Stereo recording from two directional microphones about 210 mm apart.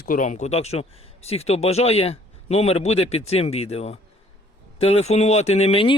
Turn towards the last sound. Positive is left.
turn(degrees=25)  # may be behind; listen again after turning